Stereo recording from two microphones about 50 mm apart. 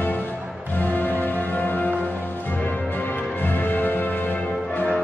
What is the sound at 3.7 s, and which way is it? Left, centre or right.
Music, left.